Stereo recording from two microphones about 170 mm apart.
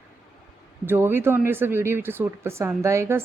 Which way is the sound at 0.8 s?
10° right (ahead or behind).